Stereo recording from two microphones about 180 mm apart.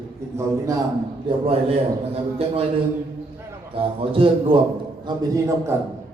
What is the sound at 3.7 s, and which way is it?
Speech, 30° right (ahead or behind).